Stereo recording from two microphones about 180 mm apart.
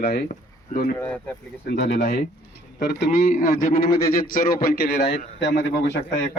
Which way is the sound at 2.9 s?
50° left (ahead or behind).